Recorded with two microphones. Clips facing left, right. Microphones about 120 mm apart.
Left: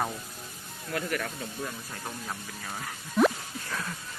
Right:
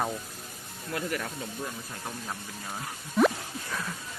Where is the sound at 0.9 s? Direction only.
20° right (ahead or behind).